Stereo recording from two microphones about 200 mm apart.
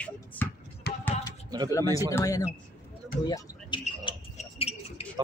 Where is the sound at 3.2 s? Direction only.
20° left (ahead or behind).